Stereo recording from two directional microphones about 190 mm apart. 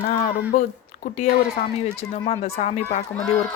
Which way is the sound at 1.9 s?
30° left (ahead or behind).